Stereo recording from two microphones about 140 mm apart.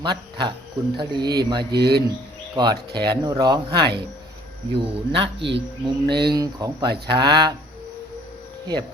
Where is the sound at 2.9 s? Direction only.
30° right (ahead or behind).